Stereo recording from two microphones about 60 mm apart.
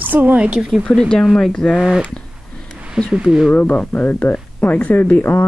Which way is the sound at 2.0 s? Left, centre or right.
Centre.